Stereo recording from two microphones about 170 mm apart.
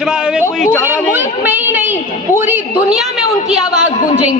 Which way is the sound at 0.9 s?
10° right (ahead or behind).